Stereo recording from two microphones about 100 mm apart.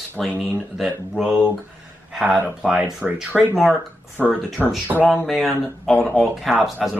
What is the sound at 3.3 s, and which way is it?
Speech, centre (ahead or behind).